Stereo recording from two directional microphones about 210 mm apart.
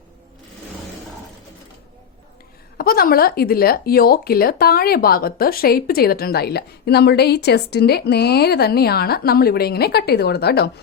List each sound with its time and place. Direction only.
2.7 s speech: 45° left (ahead or behind)